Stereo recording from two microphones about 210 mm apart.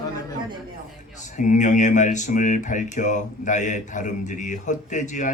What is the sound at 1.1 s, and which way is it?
Speech, 35° left (ahead or behind).